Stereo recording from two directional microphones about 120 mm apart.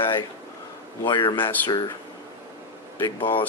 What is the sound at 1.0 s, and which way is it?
Speech, 40° left (ahead or behind).